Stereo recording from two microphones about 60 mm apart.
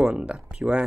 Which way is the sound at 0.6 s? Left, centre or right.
Centre.